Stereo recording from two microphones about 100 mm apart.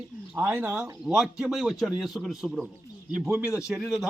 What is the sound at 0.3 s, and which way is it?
Speech, 20° right (ahead or behind).